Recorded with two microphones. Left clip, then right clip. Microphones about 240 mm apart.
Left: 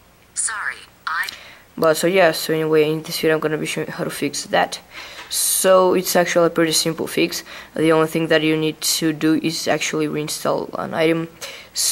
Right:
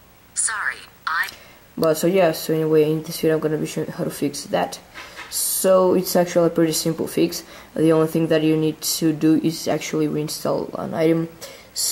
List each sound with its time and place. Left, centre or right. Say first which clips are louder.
0.4 s a sound: right 1 dB; centre
1.8 s speech: left 2 dB; centre
10.5 s speech: left 1 dB; centre
11.0 s speech: left 1 dB; centre